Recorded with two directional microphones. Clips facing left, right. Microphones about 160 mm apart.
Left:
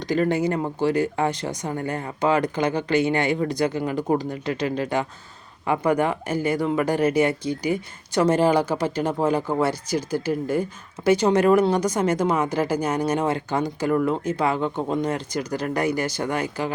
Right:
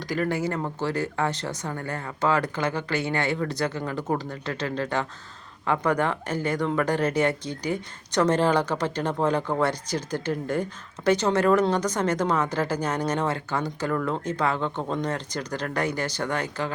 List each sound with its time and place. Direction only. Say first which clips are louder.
0.0 s speech: left 5 dB; 20° left (ahead or behind)